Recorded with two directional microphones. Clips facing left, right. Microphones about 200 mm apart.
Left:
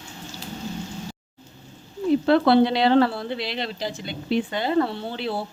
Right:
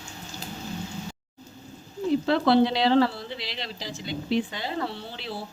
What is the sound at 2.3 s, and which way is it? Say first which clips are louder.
A woman's voice: left 3 dB; 60° left (ahead or behind).